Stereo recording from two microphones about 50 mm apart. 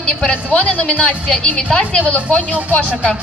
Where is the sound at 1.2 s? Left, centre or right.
Centre.